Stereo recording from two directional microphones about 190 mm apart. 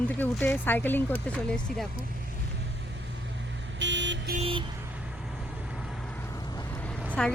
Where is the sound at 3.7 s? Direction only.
75° right (ahead or behind).